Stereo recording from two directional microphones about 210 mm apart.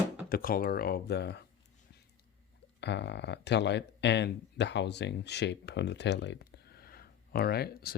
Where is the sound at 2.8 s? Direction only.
55° left (ahead or behind).